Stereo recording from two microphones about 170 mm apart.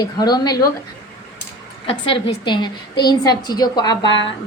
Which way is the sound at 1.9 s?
30° left (ahead or behind).